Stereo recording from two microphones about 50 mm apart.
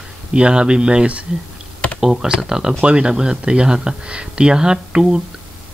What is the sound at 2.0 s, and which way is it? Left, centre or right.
Speech, centre.